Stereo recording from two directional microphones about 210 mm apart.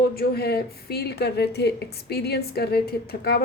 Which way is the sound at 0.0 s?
50° left (ahead or behind).